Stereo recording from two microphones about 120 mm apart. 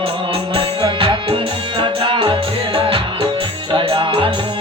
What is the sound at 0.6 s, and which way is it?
Music, 45° right (ahead or behind).